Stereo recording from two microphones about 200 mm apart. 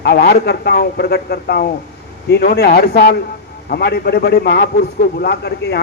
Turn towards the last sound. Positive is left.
turn(degrees=55)  # may be behind; listen again after turning